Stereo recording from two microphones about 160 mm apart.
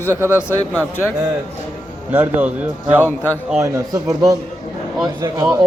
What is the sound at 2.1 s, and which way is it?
Speech, 10° right (ahead or behind).